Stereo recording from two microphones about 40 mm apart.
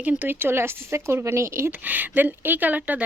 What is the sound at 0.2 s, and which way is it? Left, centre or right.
Speech, right.